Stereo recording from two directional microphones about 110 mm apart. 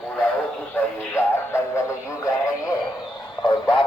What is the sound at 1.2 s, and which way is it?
Music, 20° left (ahead or behind).